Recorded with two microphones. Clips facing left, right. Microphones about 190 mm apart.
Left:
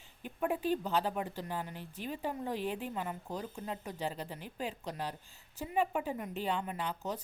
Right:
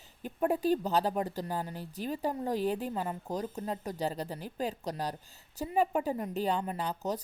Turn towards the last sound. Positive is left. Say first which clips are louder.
# right 4 dB
turn(degrees=-40)  # may be behind; listen again after turning